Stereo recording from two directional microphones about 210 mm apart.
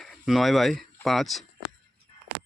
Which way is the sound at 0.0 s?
Centre (ahead or behind).